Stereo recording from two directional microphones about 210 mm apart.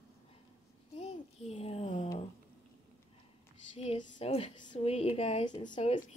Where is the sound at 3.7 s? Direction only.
30° left (ahead or behind).